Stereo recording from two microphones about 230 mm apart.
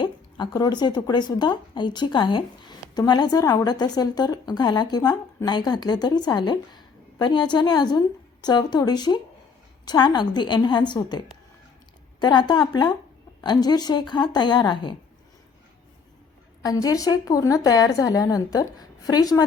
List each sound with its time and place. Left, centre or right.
0.0 s speech: centre
12.2 s speech: centre
16.6 s speech: centre